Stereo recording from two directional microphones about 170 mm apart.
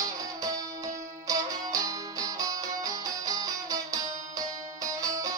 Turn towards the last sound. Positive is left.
turn(degrees=-20)  # may be behind; listen again after turning